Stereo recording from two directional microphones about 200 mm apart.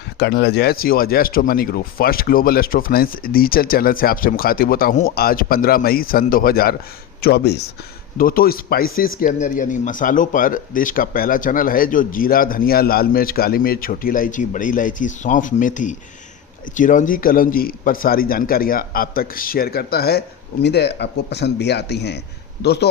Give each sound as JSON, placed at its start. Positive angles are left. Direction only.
{"t": 0.2, "sound": "speech", "side_deg": 60}